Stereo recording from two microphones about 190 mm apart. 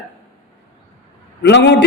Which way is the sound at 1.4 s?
65° left (ahead or behind).